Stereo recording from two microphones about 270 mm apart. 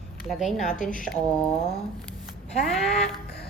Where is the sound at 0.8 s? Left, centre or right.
Left.